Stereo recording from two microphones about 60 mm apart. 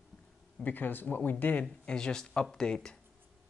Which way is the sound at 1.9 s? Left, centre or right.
Centre.